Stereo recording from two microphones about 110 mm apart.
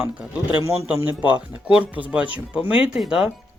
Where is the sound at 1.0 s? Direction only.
10° right (ahead or behind).